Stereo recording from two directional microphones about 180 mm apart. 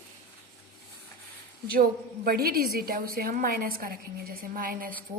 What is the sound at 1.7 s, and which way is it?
A woman's voice, 55° right (ahead or behind).